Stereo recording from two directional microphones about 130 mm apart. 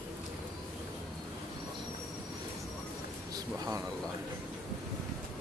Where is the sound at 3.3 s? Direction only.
30° right (ahead or behind).